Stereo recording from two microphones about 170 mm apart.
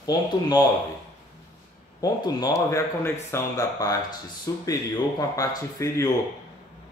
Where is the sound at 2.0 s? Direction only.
20° left (ahead or behind).